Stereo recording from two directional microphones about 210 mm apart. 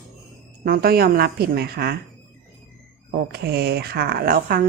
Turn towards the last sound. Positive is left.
turn(degrees=-45)  # may be behind; listen again after turning